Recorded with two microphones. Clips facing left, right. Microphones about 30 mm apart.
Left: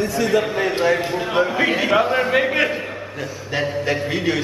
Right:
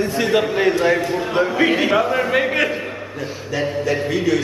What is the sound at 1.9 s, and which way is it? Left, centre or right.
Speech, centre.